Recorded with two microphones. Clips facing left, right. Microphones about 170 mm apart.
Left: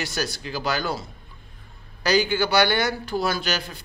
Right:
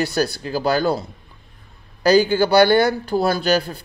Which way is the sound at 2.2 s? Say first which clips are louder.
Right 6 dB; 35° right (ahead or behind).